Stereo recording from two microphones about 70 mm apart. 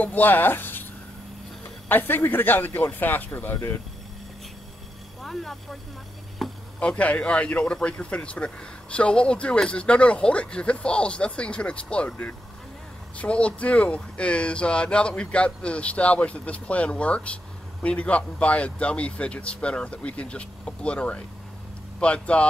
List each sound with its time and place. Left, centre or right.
0.0 s speech: left
1.9 s speech: left
5.2 s speech: centre
6.4 s chop: centre
6.8 s speech: centre